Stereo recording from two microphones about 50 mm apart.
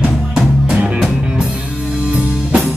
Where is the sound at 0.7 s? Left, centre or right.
Right.